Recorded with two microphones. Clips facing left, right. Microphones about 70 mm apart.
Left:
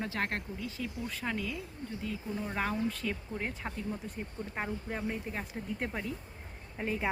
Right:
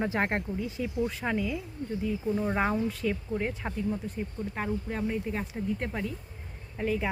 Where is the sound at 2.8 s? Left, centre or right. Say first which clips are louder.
Right 5 dB; centre.